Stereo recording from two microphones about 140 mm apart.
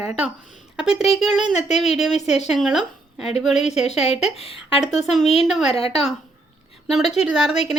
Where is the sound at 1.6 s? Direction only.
55° left (ahead or behind).